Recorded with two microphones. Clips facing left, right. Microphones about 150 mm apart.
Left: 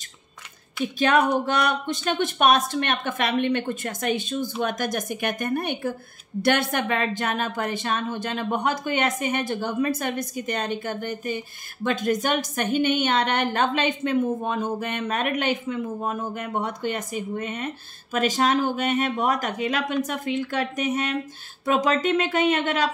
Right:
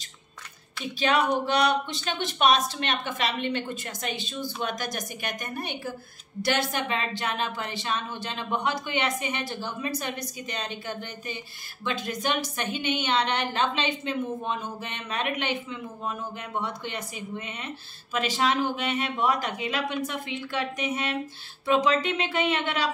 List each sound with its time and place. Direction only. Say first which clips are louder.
0.9 s speech: left 3 dB; 50° left (ahead or behind)